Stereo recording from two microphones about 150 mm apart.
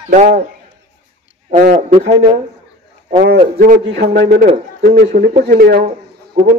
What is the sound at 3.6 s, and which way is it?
A man's voice, 80° right.